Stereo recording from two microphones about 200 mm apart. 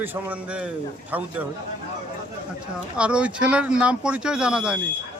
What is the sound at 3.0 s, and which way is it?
Speech, 5° right (ahead or behind).